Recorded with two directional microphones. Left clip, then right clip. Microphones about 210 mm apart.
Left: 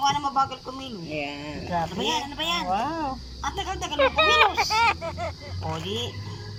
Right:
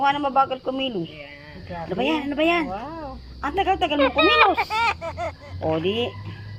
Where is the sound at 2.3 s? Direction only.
40° right (ahead or behind).